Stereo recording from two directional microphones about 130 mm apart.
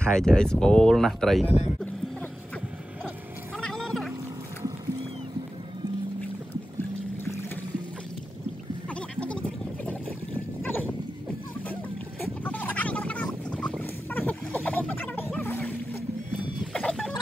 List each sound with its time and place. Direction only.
0.0 s speech: 5° left (ahead or behind)
3.5 s boat: 5° left (ahead or behind)
7.2 s music: 20° left (ahead or behind)
8.8 s a sound: 10° left (ahead or behind)
10.6 s goat: 15° left (ahead or behind)
12.2 s boat: 10° left (ahead or behind)
15.3 s a sound: 10° left (ahead or behind)